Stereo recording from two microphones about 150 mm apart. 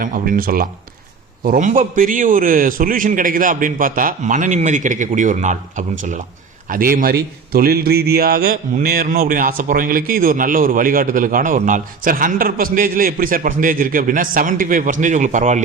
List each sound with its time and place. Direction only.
0.0 s a man's voice: 65° right (ahead or behind)
1.5 s a man's voice: 60° right (ahead or behind)
6.7 s a man's voice: 75° right (ahead or behind); by 15.6 s 55° right (ahead or behind)